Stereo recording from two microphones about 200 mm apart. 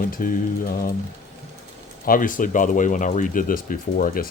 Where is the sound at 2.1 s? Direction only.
40° left (ahead or behind).